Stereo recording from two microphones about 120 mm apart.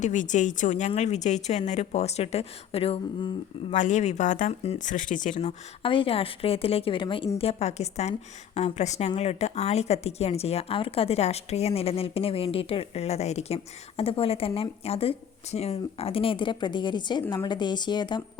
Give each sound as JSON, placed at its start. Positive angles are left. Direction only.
{"t": 0.0, "sound": "speech", "side_deg": 90}
{"t": 3.7, "sound": "speech", "side_deg": 85}
{"t": 5.8, "sound": "speech", "side_deg": 45}
{"t": 7.3, "sound": "a woman's voice", "side_deg": 60}